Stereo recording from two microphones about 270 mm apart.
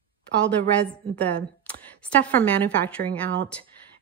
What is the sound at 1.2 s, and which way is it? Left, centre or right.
A woman's voice, centre.